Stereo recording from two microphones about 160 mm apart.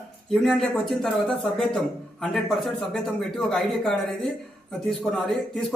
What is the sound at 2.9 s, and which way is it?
A man's voice, 5° left (ahead or behind).